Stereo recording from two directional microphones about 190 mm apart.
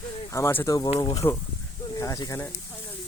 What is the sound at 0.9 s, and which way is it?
Speech, 30° left (ahead or behind).